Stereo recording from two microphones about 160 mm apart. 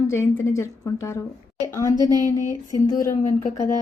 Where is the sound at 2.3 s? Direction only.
20° left (ahead or behind).